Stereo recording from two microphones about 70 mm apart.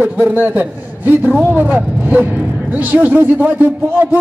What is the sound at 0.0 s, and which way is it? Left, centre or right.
A man's voice, right.